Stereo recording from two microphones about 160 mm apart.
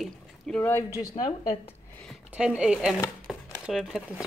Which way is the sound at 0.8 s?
25° left (ahead or behind).